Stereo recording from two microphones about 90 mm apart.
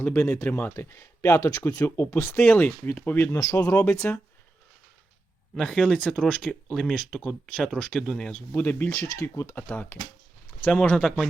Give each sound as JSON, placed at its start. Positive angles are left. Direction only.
{"t": 0.0, "sound": "speech", "side_deg": 25}
{"t": 3.3, "sound": "speech", "side_deg": 35}
{"t": 5.5, "sound": "speech", "side_deg": 10}